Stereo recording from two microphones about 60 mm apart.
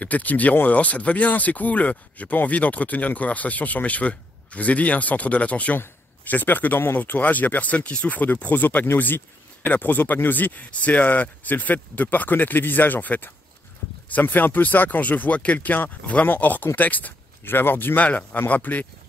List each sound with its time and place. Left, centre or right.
0.0 s speech: left